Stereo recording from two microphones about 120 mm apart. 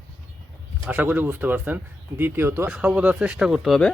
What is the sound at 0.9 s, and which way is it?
Speech, 15° right (ahead or behind).